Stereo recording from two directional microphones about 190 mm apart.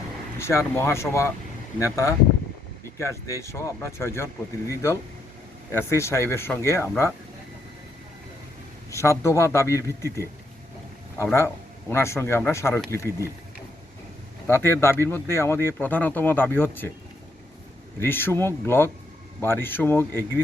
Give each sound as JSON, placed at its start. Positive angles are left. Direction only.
{"t": 0.3, "sound": "speech", "side_deg": 15}
{"t": 8.9, "sound": "speech", "side_deg": 15}
{"t": 11.3, "sound": "speech", "side_deg": 15}
{"t": 14.4, "sound": "speech", "side_deg": 10}
{"t": 18.0, "sound": "speech", "side_deg": 10}